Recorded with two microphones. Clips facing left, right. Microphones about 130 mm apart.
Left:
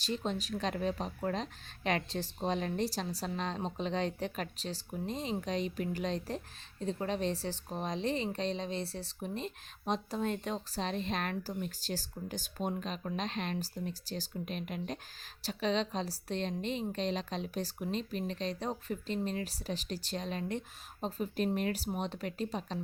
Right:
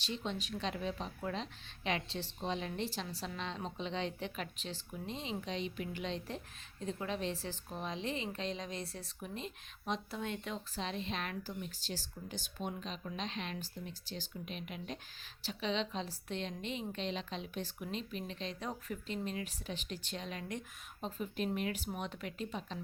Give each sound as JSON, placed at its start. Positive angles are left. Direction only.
{"t": 0.0, "sound": "a woman's voice", "side_deg": 40}